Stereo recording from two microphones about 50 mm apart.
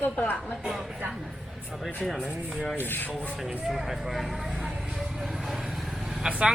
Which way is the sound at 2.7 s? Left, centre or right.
Left.